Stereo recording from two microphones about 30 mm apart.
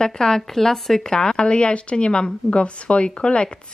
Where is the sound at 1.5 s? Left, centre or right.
Left.